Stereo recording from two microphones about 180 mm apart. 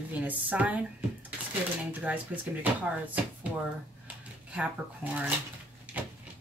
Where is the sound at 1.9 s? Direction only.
10° right (ahead or behind).